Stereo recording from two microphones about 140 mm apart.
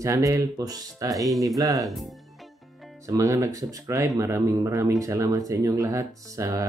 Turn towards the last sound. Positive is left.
turn(degrees=-25)  # may be behind; listen again after turning